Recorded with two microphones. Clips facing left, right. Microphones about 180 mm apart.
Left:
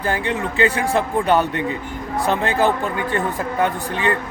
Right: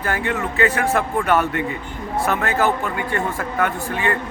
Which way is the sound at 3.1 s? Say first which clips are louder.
Left 1 dB; 20° left (ahead or behind).